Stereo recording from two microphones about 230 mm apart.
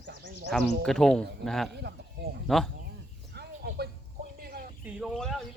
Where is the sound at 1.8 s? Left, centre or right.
Right.